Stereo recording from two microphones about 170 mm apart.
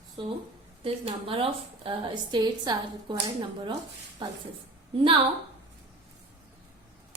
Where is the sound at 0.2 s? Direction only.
30° right (ahead or behind).